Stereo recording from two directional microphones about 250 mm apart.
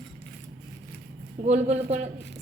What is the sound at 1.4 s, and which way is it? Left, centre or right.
Stir, right.